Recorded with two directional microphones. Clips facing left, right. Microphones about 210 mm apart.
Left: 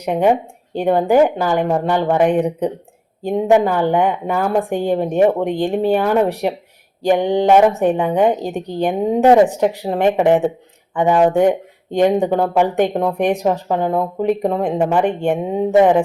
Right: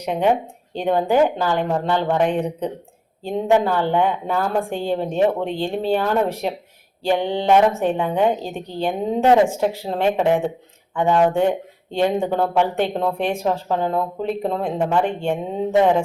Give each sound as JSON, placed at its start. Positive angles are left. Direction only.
{"t": 0.0, "sound": "speech", "side_deg": 10}